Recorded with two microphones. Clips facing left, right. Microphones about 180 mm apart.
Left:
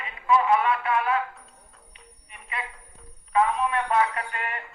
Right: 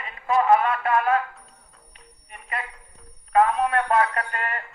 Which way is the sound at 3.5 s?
40° right (ahead or behind).